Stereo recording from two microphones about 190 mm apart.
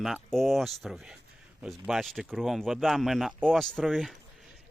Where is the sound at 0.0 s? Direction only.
Centre (ahead or behind).